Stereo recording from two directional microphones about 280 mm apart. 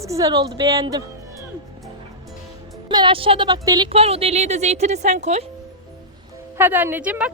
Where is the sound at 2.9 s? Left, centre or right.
Centre.